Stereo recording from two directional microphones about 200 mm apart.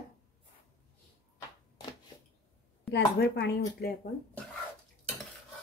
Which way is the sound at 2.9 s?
60° left (ahead or behind).